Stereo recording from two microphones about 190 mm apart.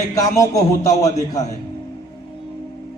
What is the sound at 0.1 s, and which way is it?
A man's voice, 15° left (ahead or behind).